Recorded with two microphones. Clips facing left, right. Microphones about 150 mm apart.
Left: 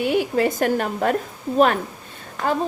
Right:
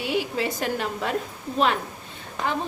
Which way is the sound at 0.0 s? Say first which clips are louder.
Left 6 dB; 50° left (ahead or behind).